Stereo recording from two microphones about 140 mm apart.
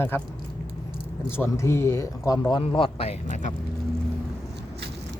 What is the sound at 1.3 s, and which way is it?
Speech, 20° left (ahead or behind).